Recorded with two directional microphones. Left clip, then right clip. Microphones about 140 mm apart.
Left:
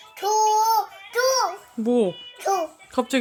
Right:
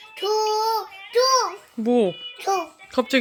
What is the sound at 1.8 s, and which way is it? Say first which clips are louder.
Speech: right 1 dB; centre (ahead or behind).